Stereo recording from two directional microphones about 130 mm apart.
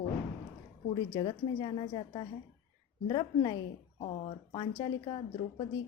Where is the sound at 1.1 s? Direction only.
35° left (ahead or behind).